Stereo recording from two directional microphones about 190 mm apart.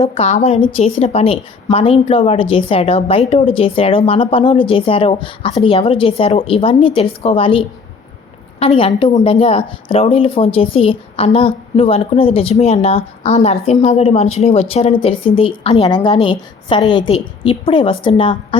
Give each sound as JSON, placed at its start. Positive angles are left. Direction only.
{"t": 0.0, "sound": "a woman's voice", "side_deg": 35}